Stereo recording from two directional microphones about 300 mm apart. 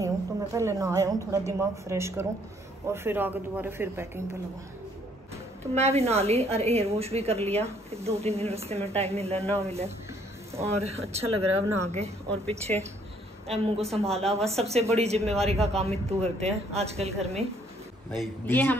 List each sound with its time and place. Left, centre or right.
0.0 s a woman's voice: centre
5.8 s a woman's voice: right
10.8 s a woman's voice: right
18.1 s speech: centre